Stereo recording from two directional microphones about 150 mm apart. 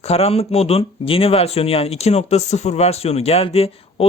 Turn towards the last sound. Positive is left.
turn(degrees=40)  # may be behind; listen again after turning